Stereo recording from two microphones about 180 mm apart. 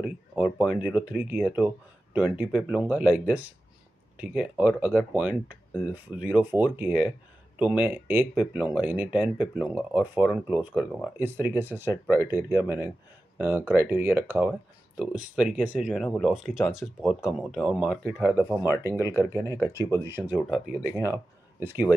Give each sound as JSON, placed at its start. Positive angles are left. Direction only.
{"t": 0.0, "sound": "speech", "side_deg": -5}
{"t": 18.9, "sound": "speech", "side_deg": 15}
{"t": 20.1, "sound": "speech", "side_deg": -15}
{"t": 20.3, "sound": "speech", "side_deg": 0}
{"t": 21.6, "sound": "speech", "side_deg": -10}